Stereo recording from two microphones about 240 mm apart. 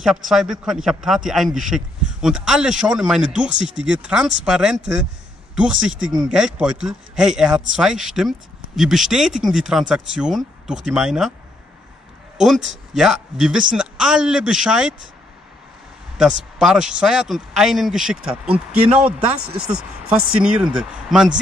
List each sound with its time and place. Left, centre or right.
0.0 s a man's voice: centre
12.4 s a man's voice: centre
16.2 s a man's voice: centre
19.3 s speech: right
20.3 s a man's voice: centre